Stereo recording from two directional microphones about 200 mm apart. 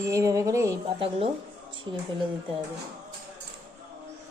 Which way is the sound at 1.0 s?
30° right (ahead or behind).